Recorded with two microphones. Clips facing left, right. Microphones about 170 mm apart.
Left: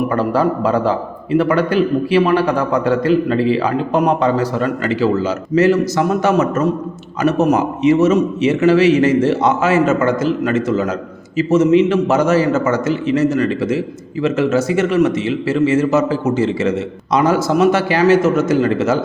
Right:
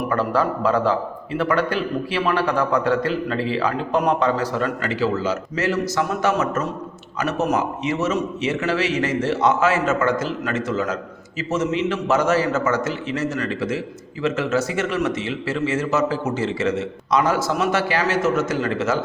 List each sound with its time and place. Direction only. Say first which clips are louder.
0.2 s a man's voice: left 5 dB; 10° left (ahead or behind)
7.5 s a man's voice: left 9 dB; 15° left (ahead or behind)